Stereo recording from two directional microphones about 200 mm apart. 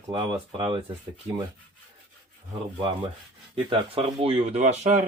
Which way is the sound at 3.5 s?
30° right (ahead or behind).